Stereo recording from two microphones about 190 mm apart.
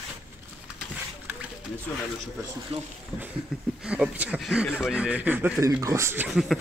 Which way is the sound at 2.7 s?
30° right (ahead or behind).